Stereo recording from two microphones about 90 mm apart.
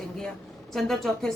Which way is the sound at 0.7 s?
5° left (ahead or behind).